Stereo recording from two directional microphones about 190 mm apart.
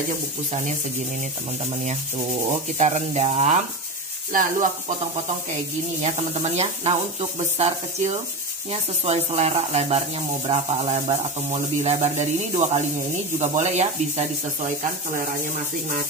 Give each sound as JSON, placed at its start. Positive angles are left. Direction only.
{"t": 2.8, "sound": "speech", "side_deg": -35}
{"t": 6.0, "sound": "speech", "side_deg": -35}